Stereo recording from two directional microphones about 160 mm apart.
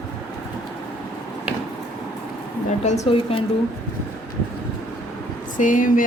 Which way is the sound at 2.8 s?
45° left (ahead or behind).